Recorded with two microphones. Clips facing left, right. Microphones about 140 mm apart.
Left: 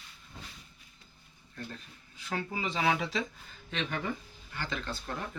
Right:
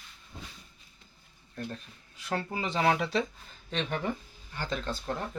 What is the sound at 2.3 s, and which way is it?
Speech, 40° right (ahead or behind).